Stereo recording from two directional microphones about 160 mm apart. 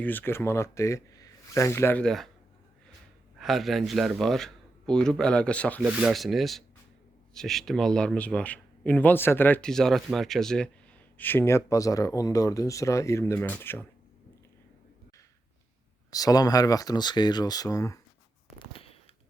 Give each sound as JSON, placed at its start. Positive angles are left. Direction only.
{"t": 0.0, "sound": "speech", "side_deg": 10}
{"t": 3.3, "sound": "speech", "side_deg": 0}
{"t": 5.8, "sound": "speech", "side_deg": -5}
{"t": 16.1, "sound": "speech", "side_deg": 25}
{"t": 18.6, "sound": "a sound", "side_deg": 35}